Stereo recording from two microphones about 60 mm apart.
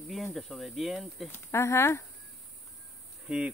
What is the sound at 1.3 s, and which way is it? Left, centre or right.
Speech, left.